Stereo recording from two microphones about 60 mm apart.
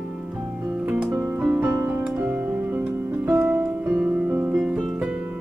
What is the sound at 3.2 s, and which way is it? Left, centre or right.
Music, right.